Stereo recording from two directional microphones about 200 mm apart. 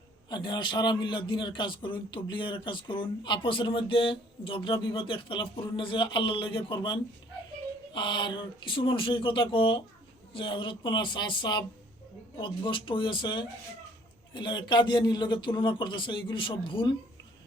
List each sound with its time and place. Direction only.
0.3 s a man's voice: 20° left (ahead or behind)